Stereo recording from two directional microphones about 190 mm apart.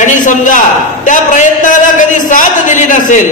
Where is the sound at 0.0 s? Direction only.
40° left (ahead or behind).